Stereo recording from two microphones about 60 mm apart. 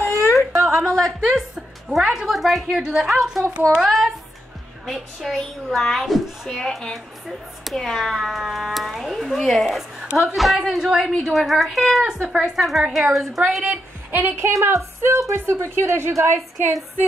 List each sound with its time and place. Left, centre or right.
0.2 s whimper: left
0.5 s a sound: right
0.7 s a woman's voice: centre
1.2 s a woman's voice: centre
14.1 s a woman's voice: right
14.6 s speech: right
15.3 s a woman's voice: right